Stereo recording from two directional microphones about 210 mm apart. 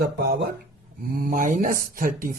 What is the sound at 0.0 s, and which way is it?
Speech, 50° right (ahead or behind).